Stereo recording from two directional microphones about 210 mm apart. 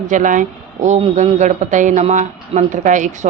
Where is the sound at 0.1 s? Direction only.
35° right (ahead or behind).